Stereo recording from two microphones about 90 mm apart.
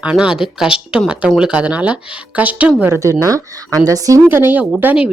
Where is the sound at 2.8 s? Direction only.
35° right (ahead or behind).